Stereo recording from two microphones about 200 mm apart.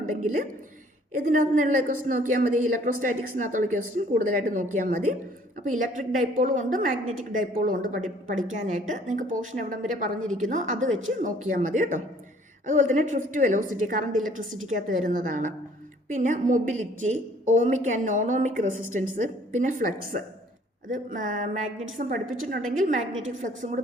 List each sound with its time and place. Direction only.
0.0 s a woman's voice: 45° right (ahead or behind)